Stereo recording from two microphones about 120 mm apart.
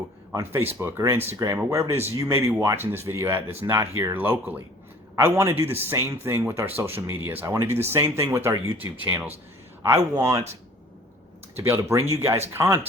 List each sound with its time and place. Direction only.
0.3 s speech: 20° right (ahead or behind)
11.5 s speech: 20° right (ahead or behind)